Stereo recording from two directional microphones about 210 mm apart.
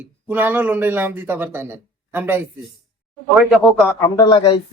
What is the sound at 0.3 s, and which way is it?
A man's voice, 10° right (ahead or behind).